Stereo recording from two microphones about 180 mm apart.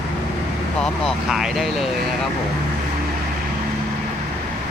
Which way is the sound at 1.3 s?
Centre (ahead or behind).